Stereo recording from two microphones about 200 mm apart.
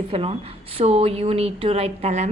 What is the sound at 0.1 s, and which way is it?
A woman's voice, 30° right (ahead or behind).